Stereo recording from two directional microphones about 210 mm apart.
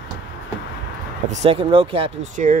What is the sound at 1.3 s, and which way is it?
Speech, 30° right (ahead or behind).